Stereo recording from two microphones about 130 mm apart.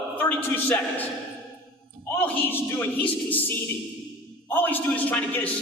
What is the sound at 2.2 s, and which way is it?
A man's voice, 15° left (ahead or behind).